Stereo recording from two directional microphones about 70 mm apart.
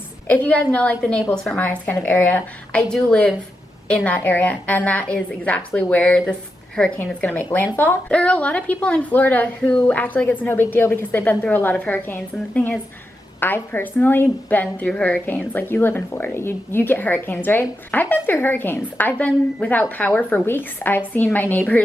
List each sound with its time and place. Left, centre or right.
0.3 s a woman's voice: left
1.5 s a woman's voice: left
2.7 s a woman's voice: centre
4.1 s a woman's voice: left